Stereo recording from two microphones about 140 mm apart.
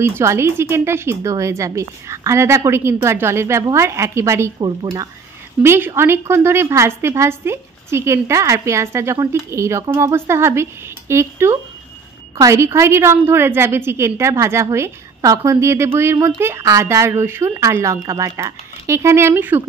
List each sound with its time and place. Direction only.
0.0 s a woman's voice: 20° right (ahead or behind)
4.6 s speech: 30° right (ahead or behind)
5.6 s a woman's voice: 15° right (ahead or behind)